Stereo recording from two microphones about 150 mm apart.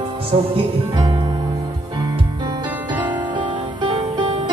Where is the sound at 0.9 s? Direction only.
30° right (ahead or behind).